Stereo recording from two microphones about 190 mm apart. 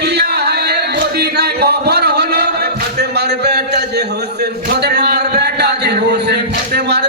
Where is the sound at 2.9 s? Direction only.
60° right (ahead or behind).